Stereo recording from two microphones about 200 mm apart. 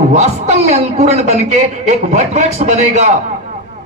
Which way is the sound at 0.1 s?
35° right (ahead or behind).